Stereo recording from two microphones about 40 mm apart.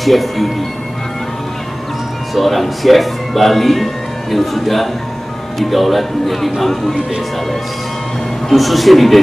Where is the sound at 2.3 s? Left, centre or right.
Centre.